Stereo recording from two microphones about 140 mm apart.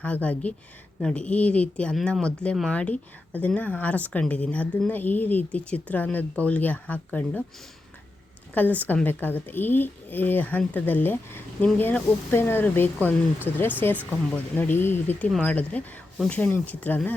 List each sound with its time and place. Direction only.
0.0 s speech: 10° left (ahead or behind)
8.5 s speech: 10° left (ahead or behind)